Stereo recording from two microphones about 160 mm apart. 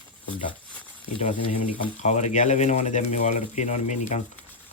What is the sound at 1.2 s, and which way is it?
Speech, 35° left (ahead or behind).